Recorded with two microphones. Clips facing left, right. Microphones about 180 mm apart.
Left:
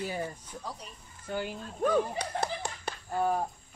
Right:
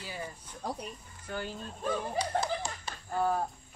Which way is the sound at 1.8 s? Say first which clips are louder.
Left 5 dB; 60° left (ahead or behind).